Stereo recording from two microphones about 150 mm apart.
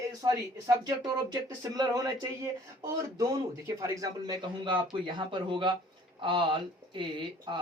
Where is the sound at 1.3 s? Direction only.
25° right (ahead or behind).